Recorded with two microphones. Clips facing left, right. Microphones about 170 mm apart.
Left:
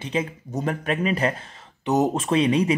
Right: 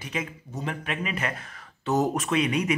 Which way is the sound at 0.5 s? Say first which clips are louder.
Left 7 dB; 40° left (ahead or behind).